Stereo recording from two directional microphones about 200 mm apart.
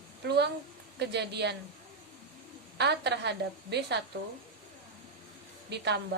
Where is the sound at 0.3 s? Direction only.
55° right (ahead or behind).